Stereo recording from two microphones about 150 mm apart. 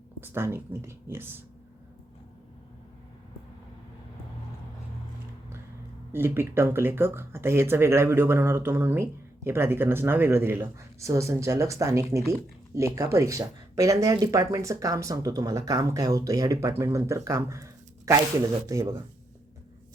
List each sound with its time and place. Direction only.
0.2 s speech: 15° right (ahead or behind)
6.1 s speech: 15° right (ahead or behind)